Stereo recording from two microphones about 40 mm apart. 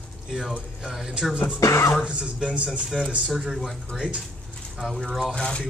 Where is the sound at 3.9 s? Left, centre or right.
Centre.